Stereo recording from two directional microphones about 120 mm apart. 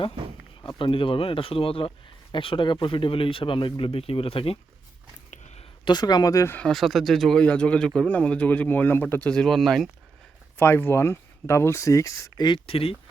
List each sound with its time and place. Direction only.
0.6 s speech: 45° left (ahead or behind)
5.3 s a sound: 70° left (ahead or behind)
5.8 s speech: 35° left (ahead or behind)
6.5 s speech: 5° left (ahead or behind)
9.3 s speech: 5° left (ahead or behind)
10.6 s speech: 20° left (ahead or behind)
12.5 s speech: 50° left (ahead or behind)